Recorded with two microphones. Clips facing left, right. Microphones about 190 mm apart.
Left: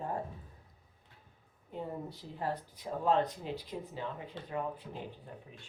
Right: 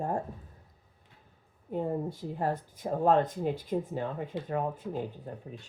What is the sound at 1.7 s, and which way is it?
Speech, 50° right (ahead or behind).